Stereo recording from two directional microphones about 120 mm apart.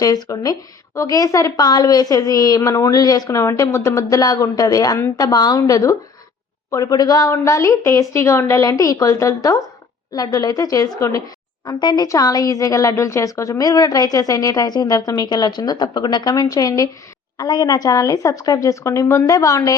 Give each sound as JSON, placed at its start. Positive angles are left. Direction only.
{"t": 0.0, "sound": "a woman's voice", "side_deg": 30}